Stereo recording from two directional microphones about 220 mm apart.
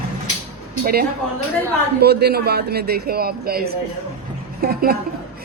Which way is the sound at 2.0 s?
45° right (ahead or behind).